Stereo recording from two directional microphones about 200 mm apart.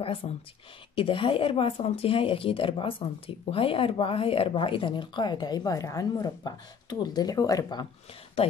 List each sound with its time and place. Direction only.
0.0 s speech: 25° left (ahead or behind)
8.4 s speech: 30° left (ahead or behind)